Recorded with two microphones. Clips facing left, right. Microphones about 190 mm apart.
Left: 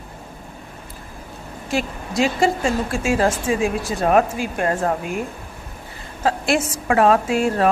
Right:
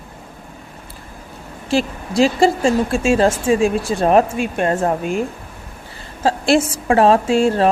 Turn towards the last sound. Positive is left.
turn(degrees=-30)  # may be behind; listen again after turning